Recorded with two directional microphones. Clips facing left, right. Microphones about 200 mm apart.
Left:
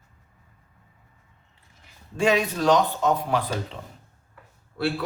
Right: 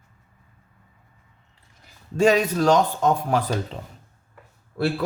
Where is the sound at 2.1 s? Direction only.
40° right (ahead or behind).